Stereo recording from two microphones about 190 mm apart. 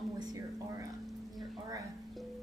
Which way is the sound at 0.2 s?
20° right (ahead or behind).